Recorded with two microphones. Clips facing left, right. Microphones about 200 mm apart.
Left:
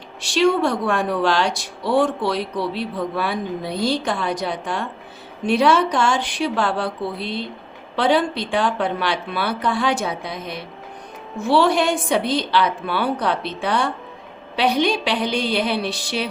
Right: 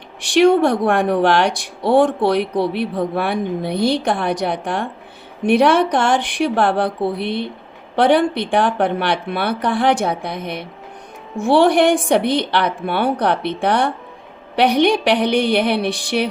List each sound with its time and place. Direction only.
0.2 s speech: 60° right (ahead or behind)